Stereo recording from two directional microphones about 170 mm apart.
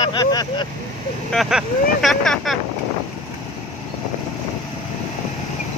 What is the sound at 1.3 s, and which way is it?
Speech, centre (ahead or behind).